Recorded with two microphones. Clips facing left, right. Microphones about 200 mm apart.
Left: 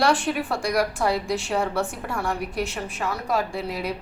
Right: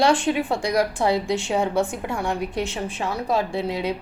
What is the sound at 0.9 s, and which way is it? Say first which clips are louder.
Speech: right 3 dB; 30° right (ahead or behind).